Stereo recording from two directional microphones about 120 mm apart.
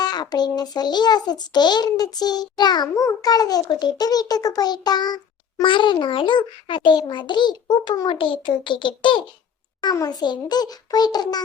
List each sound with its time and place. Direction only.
0.0 s a child's voice: 35° left (ahead or behind)
9.8 s a child's voice: 30° left (ahead or behind)